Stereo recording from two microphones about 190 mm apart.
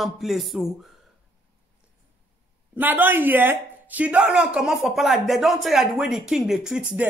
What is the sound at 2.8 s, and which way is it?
Speech, 10° right (ahead or behind).